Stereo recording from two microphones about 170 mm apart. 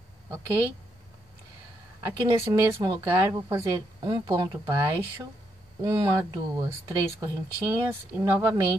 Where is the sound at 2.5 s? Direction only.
20° right (ahead or behind).